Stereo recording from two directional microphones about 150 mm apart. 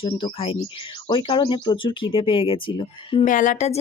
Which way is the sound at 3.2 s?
60° left (ahead or behind).